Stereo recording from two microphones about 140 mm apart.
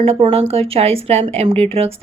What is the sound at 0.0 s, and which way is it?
Speech, 45° right (ahead or behind).